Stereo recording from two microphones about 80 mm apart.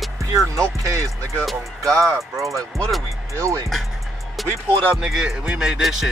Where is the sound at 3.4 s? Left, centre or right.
Right.